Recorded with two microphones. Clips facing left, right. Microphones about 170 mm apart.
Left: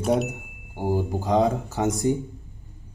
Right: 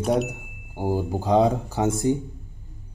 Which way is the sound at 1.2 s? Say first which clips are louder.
Right 3 dB; 10° right (ahead or behind).